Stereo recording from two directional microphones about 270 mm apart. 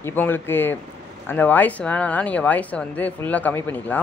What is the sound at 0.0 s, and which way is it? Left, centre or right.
Speech, centre.